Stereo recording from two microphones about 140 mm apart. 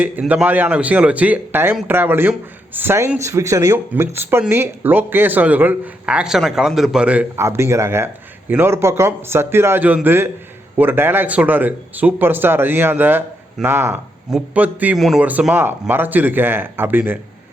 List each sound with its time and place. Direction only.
0.0 s speech: 10° right (ahead or behind)